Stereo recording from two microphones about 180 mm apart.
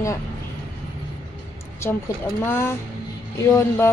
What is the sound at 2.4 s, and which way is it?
A woman's voice, 15° left (ahead or behind).